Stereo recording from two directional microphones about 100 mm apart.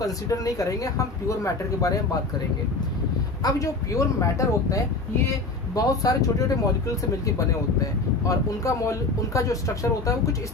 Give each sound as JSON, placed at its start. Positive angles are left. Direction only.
{"t": 0.0, "sound": "speech", "side_deg": 35}
{"t": 3.4, "sound": "speech", "side_deg": 35}
{"t": 8.3, "sound": "speech", "side_deg": 30}